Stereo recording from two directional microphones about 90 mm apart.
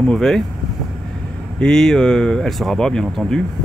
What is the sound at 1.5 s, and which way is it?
Speech, 5° left (ahead or behind).